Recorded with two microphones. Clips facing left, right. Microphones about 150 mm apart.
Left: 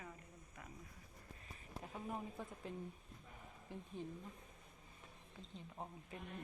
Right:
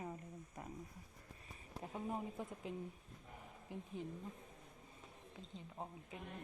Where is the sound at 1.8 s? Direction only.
20° right (ahead or behind).